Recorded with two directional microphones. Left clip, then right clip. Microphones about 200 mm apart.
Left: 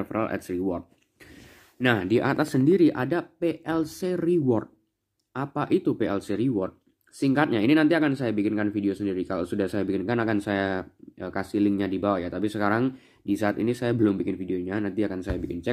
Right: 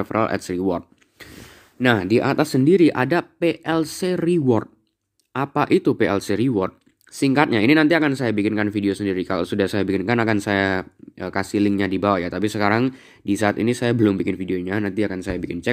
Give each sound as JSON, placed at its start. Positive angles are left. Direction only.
{"t": 0.0, "sound": "speech", "side_deg": -40}
{"t": 1.8, "sound": "speech", "side_deg": -25}